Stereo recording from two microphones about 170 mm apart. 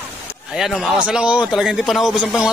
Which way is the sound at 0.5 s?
Centre (ahead or behind).